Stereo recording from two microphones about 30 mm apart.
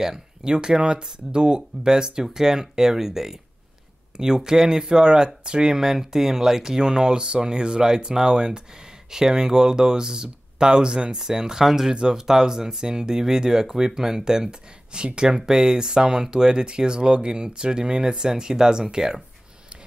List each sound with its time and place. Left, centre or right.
0.0 s speech: centre
5.7 s speech: centre
6.8 s speech: right
11.9 s speech: right
12.3 s speech: centre
14.9 s speech: right